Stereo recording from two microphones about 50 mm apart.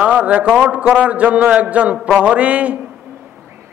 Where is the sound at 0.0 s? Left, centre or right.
Right.